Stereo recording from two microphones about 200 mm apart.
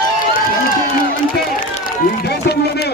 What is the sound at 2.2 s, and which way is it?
Run, 55° left (ahead or behind).